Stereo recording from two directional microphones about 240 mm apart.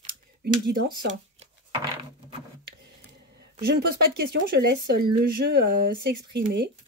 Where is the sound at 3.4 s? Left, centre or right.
Right.